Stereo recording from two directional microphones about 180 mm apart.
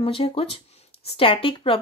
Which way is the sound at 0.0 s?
30° left (ahead or behind).